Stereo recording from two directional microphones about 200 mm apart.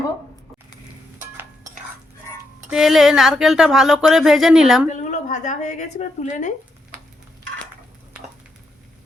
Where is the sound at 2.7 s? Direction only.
Centre (ahead or behind).